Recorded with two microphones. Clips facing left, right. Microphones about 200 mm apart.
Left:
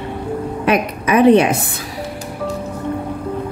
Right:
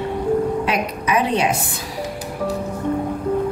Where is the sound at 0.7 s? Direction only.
55° left (ahead or behind).